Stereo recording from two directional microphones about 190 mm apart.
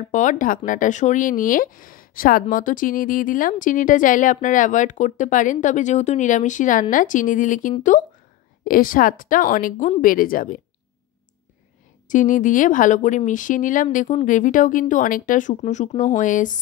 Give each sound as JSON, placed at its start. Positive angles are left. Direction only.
{"t": 0.1, "sound": "a woman's voice", "side_deg": 40}
{"t": 12.1, "sound": "a woman's voice", "side_deg": 45}